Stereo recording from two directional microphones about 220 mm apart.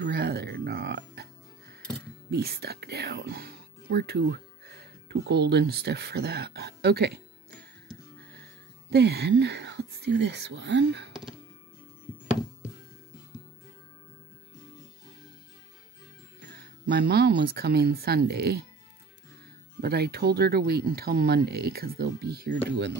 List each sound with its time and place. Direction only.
0.0 s music: 50° right (ahead or behind)
2.3 s speech: 45° right (ahead or behind)
8.9 s speech: 50° right (ahead or behind)
16.5 s speech: 45° right (ahead or behind)
19.8 s speech: 45° right (ahead or behind)